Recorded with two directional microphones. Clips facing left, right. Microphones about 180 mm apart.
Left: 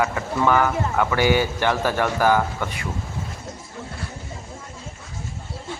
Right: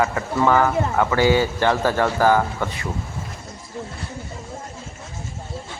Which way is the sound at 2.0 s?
20° right (ahead or behind).